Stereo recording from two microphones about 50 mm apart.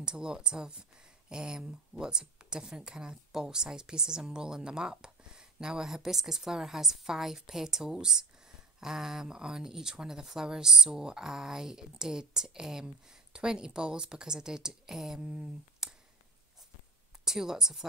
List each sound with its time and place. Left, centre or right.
0.0 s speech: centre
17.2 s speech: centre